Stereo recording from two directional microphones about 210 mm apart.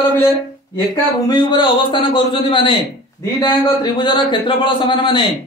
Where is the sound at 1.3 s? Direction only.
20° left (ahead or behind).